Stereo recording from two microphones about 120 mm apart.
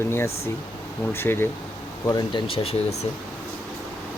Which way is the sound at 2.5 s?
55° left (ahead or behind).